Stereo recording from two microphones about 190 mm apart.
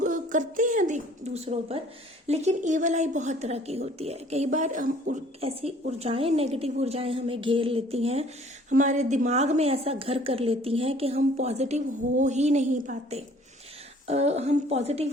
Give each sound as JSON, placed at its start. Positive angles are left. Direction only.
{"t": 0.0, "sound": "a woman's voice", "side_deg": -40}
{"t": 5.4, "sound": "a woman's voice", "side_deg": -30}